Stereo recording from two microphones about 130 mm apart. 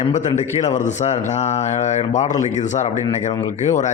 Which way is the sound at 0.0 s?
60° left (ahead or behind).